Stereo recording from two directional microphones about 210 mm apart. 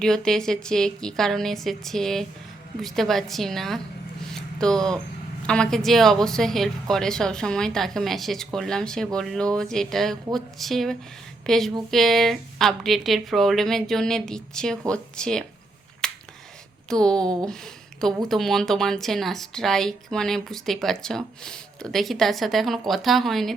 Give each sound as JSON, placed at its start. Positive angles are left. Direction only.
{"t": 0.0, "sound": "speech", "side_deg": 5}
{"t": 16.0, "sound": "finger snapping", "side_deg": 5}
{"t": 16.9, "sound": "speech", "side_deg": 5}